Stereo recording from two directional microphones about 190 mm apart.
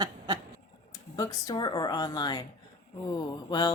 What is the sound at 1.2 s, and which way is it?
Speech, 20° left (ahead or behind).